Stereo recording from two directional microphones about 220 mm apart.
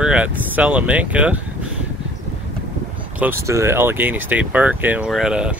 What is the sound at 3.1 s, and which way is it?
Speech, 10° right (ahead or behind).